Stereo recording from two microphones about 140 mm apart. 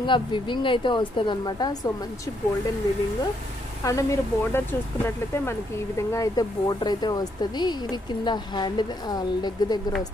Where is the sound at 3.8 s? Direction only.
20° left (ahead or behind).